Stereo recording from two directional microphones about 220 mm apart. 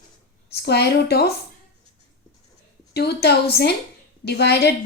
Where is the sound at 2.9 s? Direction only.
50° left (ahead or behind).